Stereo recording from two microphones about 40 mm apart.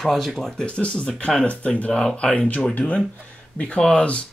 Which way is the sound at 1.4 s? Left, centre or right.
Left.